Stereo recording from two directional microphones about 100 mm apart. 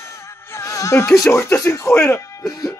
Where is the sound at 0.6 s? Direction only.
30° left (ahead or behind).